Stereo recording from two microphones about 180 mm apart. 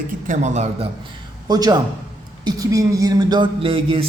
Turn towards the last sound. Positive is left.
turn(degrees=-30)  # may be behind; listen again after turning